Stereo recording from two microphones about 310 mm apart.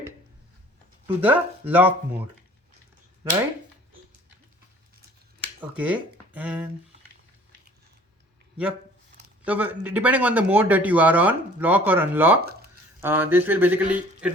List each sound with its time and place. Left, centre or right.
1.0 s speech: centre
5.5 s speech: centre
9.4 s speech: centre
12.4 s a sound: right
13.0 s speech: centre